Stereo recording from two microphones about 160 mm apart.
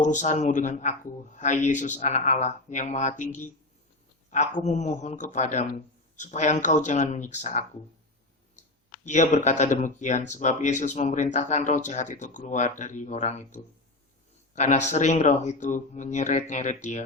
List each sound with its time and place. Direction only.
0.0 s speech: 50° left (ahead or behind)
4.6 s speech: 45° left (ahead or behind)
9.0 s speech: 50° left (ahead or behind)